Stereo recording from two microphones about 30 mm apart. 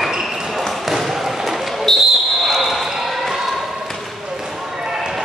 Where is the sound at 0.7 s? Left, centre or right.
Centre.